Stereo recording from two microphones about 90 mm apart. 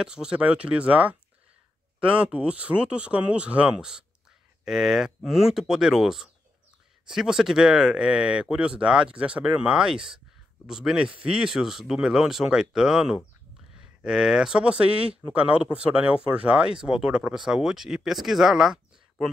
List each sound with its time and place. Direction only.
0.0 s speech: 10° right (ahead or behind)